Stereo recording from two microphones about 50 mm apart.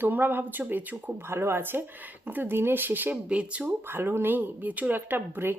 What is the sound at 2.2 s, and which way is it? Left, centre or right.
Speech, right.